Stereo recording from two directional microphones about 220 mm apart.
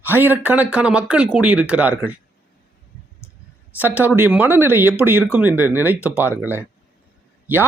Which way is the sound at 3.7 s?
10° right (ahead or behind).